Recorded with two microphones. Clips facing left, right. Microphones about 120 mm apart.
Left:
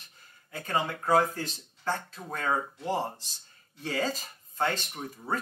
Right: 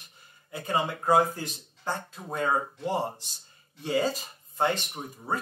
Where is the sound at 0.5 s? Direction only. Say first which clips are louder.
Right 2 dB; 15° right (ahead or behind).